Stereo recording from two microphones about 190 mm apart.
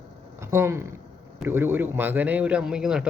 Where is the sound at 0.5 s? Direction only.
15° right (ahead or behind).